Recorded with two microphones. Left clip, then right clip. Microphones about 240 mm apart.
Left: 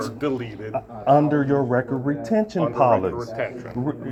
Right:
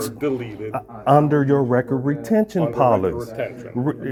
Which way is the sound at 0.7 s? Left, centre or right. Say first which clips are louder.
Right 1 dB; right.